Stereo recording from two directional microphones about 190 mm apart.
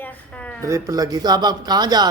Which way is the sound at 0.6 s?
15° right (ahead or behind).